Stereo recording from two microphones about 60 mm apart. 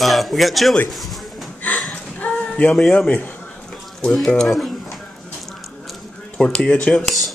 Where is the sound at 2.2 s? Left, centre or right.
Left.